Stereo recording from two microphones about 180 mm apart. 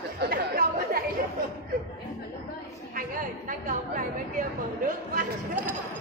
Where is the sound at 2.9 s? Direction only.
50° right (ahead or behind).